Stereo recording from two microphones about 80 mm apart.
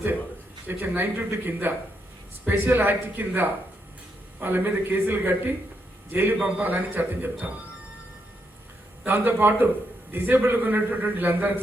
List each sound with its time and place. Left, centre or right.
0.7 s a man's voice: right
9.0 s a man's voice: right